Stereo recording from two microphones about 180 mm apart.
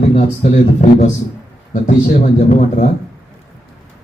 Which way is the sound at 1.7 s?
45° left (ahead or behind).